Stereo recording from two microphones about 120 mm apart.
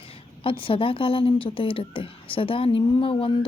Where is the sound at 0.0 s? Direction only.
50° left (ahead or behind).